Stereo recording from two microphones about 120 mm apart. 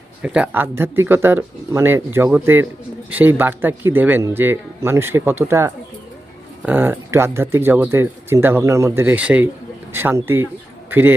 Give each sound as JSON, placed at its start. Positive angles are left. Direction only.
{"t": 0.2, "sound": "a man's voice", "side_deg": -10}